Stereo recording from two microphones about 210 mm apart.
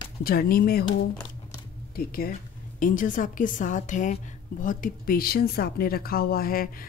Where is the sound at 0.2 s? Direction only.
45° left (ahead or behind).